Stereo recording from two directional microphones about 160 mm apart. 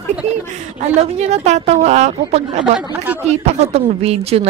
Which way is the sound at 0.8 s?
40° right (ahead or behind).